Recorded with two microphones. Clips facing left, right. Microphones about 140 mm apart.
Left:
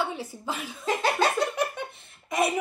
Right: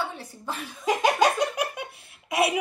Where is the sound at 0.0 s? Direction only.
10° left (ahead or behind).